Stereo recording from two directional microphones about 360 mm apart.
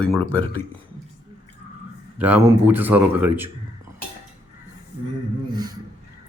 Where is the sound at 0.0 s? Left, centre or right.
Centre.